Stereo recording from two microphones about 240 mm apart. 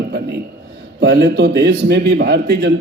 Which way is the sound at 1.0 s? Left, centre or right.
Right.